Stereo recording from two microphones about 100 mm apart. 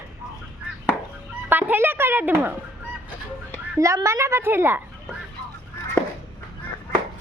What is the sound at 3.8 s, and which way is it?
A child's voice, 30° right (ahead or behind).